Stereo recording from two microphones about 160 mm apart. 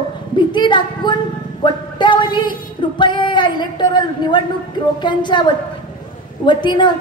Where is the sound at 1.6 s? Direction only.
30° left (ahead or behind).